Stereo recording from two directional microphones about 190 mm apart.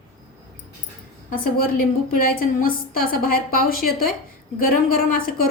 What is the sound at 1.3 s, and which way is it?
A woman's voice, 50° left (ahead or behind).